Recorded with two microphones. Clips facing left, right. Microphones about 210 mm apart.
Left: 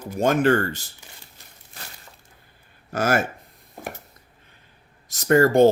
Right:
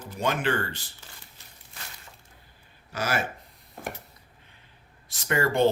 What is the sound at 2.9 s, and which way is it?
Speech, 50° left (ahead or behind).